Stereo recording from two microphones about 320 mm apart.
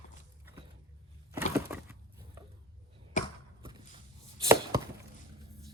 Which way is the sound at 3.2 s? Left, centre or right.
Left.